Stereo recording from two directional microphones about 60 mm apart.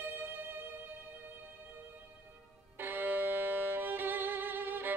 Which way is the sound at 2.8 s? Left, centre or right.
Right.